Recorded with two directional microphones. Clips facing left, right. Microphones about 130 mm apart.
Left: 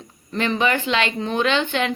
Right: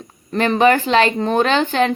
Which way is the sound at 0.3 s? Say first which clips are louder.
Right 7 dB; 45° right (ahead or behind).